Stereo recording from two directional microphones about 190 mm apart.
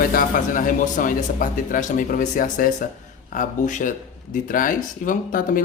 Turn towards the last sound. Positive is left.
turn(degrees=45)  # may be behind; listen again after turning